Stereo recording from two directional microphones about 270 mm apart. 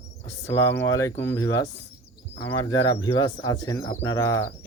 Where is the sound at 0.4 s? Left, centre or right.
Centre.